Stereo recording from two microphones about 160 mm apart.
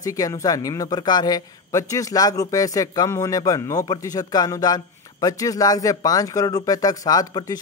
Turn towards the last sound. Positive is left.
turn(degrees=25)  # may be behind; listen again after turning